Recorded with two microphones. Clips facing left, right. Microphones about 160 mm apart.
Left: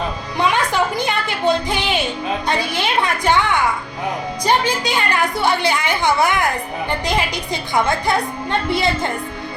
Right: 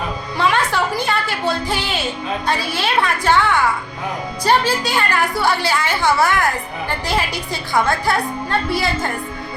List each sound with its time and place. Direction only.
0.3 s music: 15° left (ahead or behind)
2.5 s a woman's voice: 20° left (ahead or behind)
4.4 s a woman's voice: 15° left (ahead or behind)